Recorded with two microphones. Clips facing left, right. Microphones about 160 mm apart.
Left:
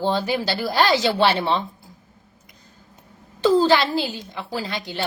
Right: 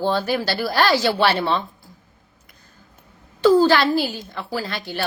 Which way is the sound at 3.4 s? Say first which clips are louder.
Right 2 dB; 20° left (ahead or behind).